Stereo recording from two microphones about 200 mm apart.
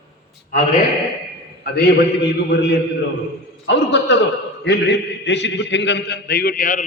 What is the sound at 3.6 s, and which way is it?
A man's voice, 60° left (ahead or behind).